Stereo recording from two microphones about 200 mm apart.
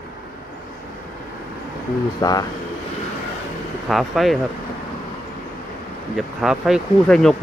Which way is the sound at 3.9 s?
Centre (ahead or behind).